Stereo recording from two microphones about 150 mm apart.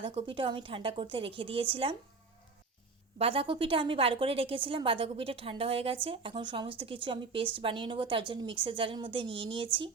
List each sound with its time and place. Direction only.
0.0 s a woman's voice: 35° right (ahead or behind)
3.2 s a woman's voice: 40° right (ahead or behind)